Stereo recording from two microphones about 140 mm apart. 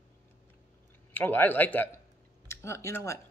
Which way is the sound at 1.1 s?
10° left (ahead or behind).